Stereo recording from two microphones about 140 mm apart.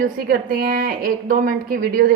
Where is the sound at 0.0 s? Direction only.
90° right.